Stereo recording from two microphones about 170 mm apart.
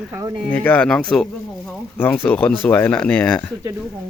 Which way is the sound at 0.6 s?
10° left (ahead or behind).